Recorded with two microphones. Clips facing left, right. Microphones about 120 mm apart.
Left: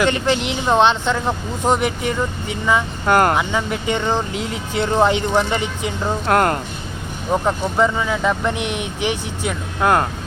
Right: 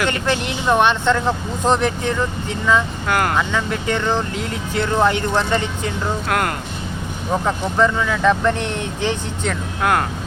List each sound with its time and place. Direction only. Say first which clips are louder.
0.0 s speech: left 2 dB; 20° left (ahead or behind)
3.1 s speech: left 5 dB; 35° left (ahead or behind)
3.3 s speech: even; 15° left (ahead or behind)
6.2 s speech: left 7 dB; 35° left (ahead or behind)
7.4 s speech: right 1 dB; 15° left (ahead or behind)
9.8 s speech: left 2 dB; 25° left (ahead or behind)